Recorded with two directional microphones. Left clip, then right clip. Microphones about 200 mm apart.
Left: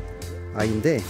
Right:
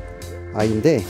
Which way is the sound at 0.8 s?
25° right (ahead or behind).